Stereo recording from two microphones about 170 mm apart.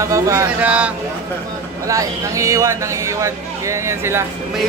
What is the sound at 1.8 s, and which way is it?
Speech, 20° right (ahead or behind).